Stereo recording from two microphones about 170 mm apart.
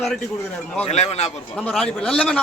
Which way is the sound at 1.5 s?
5° left (ahead or behind).